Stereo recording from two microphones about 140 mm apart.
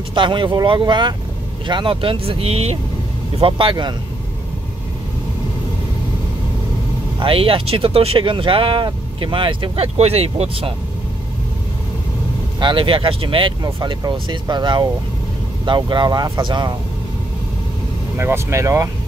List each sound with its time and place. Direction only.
0.1 s speech: 35° right (ahead or behind)
7.2 s speech: 40° right (ahead or behind)
12.5 s speech: 35° right (ahead or behind)
13.6 s speech: 30° right (ahead or behind)
18.1 s speech: 15° right (ahead or behind)